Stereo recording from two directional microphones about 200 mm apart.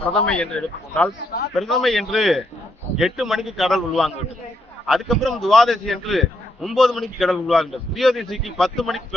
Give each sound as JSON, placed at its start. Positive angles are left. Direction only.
{"t": 0.1, "sound": "a man's voice", "side_deg": 5}